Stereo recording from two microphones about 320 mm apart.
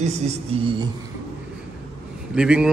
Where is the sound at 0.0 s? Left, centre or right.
Centre.